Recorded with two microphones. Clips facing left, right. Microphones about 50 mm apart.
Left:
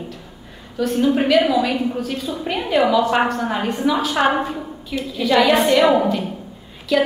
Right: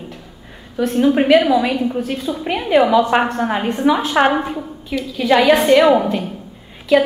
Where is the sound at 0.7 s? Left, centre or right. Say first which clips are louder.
Right 3 dB; right.